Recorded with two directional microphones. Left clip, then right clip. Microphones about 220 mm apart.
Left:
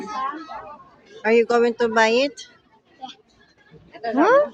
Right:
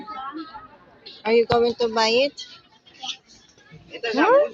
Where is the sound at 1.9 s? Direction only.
40° left (ahead or behind).